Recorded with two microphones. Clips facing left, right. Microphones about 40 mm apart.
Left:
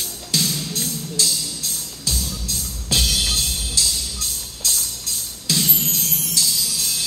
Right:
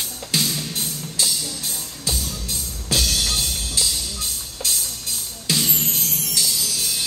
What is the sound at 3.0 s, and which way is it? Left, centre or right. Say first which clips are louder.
Music: left 1 dB; left.